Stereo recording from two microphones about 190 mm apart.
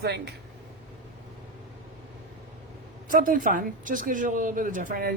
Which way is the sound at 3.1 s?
45° right (ahead or behind).